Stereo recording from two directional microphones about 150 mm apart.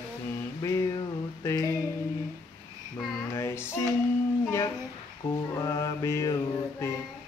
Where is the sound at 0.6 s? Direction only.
20° left (ahead or behind).